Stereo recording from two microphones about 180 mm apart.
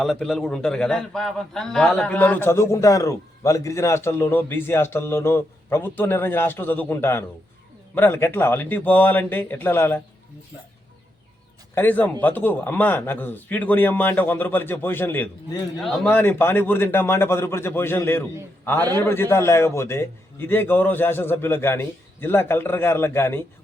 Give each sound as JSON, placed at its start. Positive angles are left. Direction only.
{"t": 0.0, "sound": "a man's voice", "side_deg": 0}
{"t": 11.7, "sound": "a man's voice", "side_deg": 10}